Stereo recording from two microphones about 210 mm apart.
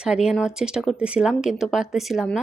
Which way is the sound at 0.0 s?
5° right (ahead or behind).